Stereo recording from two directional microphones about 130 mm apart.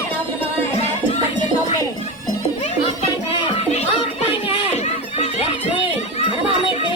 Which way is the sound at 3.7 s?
55° left (ahead or behind).